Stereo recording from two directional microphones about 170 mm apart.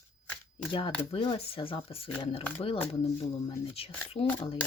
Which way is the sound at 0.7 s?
30° left (ahead or behind).